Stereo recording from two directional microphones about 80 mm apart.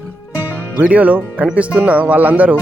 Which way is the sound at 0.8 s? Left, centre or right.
Centre.